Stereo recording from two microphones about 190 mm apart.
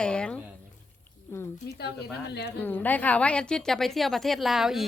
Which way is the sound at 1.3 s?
10° left (ahead or behind).